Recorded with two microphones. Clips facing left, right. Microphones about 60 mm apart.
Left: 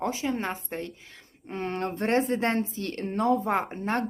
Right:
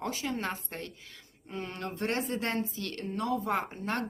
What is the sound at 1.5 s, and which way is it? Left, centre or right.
A woman's voice, left.